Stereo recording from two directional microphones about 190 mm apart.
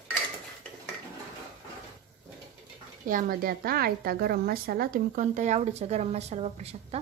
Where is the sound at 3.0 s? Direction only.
45° right (ahead or behind).